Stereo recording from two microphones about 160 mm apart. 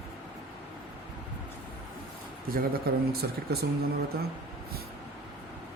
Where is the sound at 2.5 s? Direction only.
70° right (ahead or behind).